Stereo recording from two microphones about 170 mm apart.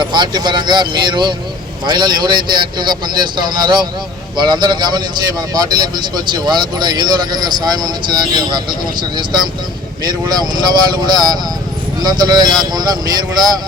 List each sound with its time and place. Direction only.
0.0 s a man's voice: 25° right (ahead or behind)